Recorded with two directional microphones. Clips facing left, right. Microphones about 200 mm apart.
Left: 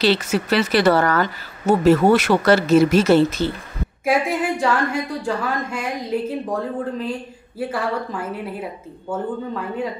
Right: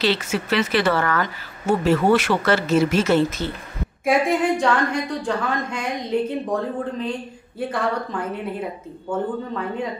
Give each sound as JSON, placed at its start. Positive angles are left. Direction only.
{"t": 0.0, "sound": "speech", "side_deg": 40}
{"t": 4.0, "sound": "a woman's voice", "side_deg": 5}